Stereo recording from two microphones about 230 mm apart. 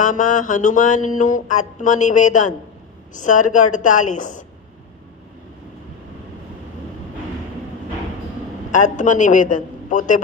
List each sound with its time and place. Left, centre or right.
0.0 s a man's voice: left
8.7 s a man's voice: left